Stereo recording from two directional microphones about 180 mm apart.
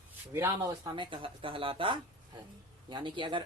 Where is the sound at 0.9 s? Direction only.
30° right (ahead or behind).